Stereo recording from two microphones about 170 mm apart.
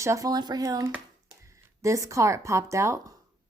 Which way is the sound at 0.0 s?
20° right (ahead or behind).